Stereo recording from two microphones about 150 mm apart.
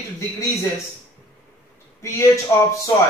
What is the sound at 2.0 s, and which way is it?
Speech, 20° left (ahead or behind).